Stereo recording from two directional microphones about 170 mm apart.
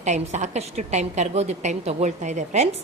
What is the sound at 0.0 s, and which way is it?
A woman's voice, 45° right (ahead or behind).